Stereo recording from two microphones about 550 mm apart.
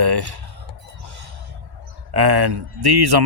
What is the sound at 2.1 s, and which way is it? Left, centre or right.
Speech, right.